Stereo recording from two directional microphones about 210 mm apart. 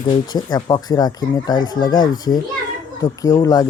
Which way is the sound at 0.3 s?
20° left (ahead or behind).